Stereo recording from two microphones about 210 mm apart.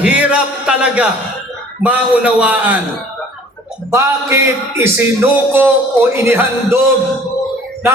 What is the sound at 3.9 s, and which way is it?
A man's voice, 15° right (ahead or behind).